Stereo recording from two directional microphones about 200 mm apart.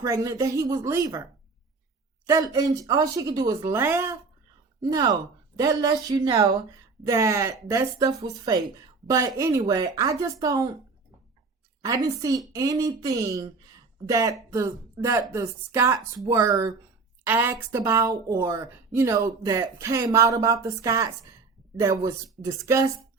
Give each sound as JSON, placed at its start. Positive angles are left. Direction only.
{"t": 0.0, "sound": "speech", "side_deg": -15}
{"t": 2.2, "sound": "speech", "side_deg": -15}
{"t": 11.8, "sound": "speech", "side_deg": -15}